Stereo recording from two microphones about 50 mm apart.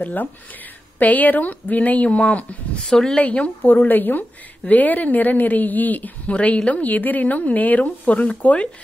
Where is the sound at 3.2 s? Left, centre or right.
Left.